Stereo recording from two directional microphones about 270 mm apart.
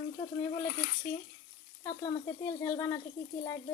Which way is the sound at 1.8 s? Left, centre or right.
Centre.